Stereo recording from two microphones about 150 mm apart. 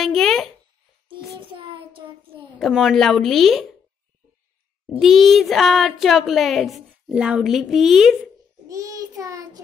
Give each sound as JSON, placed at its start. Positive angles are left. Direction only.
{"t": 0.0, "sound": "a sound", "side_deg": 0}
{"t": 1.0, "sound": "child singing", "side_deg": -35}
{"t": 2.6, "sound": "a child's voice", "side_deg": 0}
{"t": 4.9, "sound": "a child's voice", "side_deg": 0}
{"t": 8.6, "sound": "child singing", "side_deg": -20}